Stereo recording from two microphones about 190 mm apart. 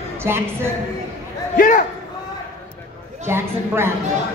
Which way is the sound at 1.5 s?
45° left (ahead or behind).